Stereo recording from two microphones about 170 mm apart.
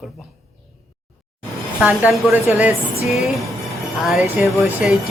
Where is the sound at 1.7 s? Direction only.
5° right (ahead or behind).